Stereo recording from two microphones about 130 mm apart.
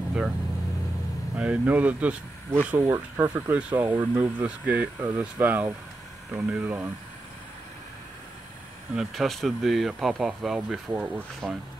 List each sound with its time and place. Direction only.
1.3 s speech: 10° right (ahead or behind)
8.9 s speech: centre (ahead or behind)
10.9 s speech: 15° right (ahead or behind)